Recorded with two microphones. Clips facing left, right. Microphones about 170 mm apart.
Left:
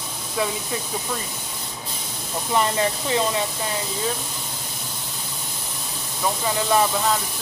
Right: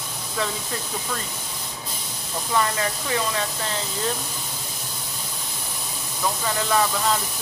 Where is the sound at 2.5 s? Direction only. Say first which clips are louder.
Left 3 dB; 25° left (ahead or behind).